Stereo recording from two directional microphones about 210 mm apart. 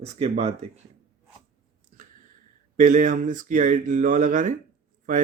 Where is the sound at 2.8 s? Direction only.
40° right (ahead or behind).